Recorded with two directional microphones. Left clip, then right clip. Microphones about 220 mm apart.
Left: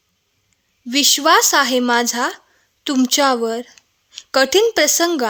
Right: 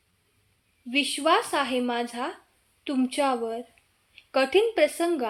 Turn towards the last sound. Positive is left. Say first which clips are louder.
# left 8 dB
turn(degrees=50)  # may be behind; listen again after turning